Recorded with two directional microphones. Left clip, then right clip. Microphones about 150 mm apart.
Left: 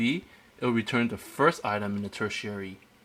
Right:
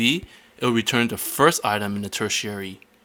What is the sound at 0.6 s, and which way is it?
Speech, 25° right (ahead or behind).